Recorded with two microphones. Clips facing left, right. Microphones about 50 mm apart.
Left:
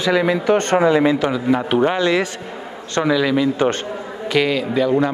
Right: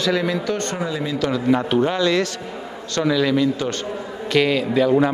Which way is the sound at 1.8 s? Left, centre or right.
Left.